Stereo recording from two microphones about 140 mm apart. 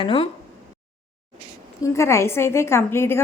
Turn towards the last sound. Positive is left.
turn(degrees=15)  # may be behind; listen again after turning